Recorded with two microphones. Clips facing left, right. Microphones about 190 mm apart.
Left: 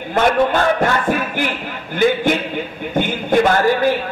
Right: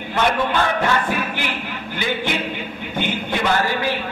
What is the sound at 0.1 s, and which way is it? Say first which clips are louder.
Speech: left 5 dB; 45° left (ahead or behind).